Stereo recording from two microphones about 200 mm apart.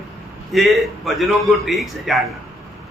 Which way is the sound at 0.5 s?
Centre (ahead or behind).